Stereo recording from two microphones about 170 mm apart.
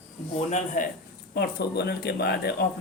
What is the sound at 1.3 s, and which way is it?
A woman's voice, 70° left (ahead or behind).